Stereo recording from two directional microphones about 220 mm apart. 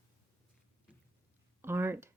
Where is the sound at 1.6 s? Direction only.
10° right (ahead or behind).